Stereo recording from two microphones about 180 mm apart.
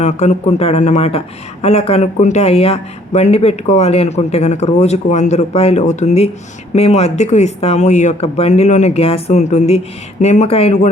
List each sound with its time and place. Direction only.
0.0 s speech: 40° left (ahead or behind)